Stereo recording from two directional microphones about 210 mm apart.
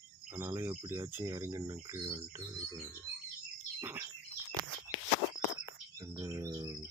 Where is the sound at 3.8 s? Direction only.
10° right (ahead or behind).